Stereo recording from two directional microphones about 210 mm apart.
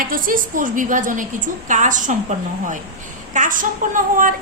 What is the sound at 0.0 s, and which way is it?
A woman's voice, 40° right (ahead or behind).